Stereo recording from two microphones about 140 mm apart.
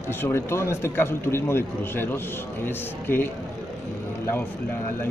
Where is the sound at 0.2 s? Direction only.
20° left (ahead or behind).